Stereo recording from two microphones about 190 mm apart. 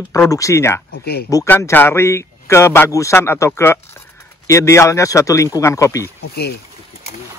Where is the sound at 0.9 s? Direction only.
55° left (ahead or behind).